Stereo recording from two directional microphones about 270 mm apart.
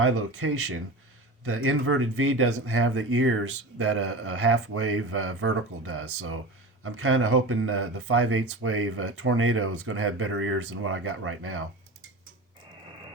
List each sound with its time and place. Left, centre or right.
0.0 s speech: right